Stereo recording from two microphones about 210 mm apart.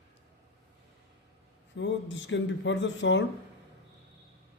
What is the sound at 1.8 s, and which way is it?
A man's voice, 60° left (ahead or behind).